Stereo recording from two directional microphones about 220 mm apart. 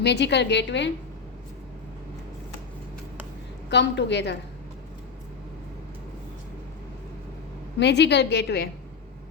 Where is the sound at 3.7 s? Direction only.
50° left (ahead or behind).